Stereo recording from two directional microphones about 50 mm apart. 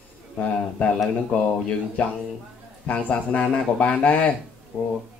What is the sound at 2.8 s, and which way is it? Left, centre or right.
Speech, left.